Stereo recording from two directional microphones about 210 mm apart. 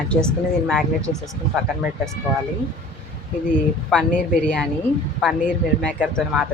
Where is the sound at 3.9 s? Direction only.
5° left (ahead or behind).